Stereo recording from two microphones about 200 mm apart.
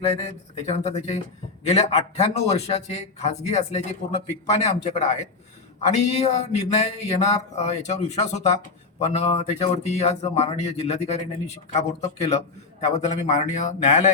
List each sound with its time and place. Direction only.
0.0 s a man's voice: 35° left (ahead or behind)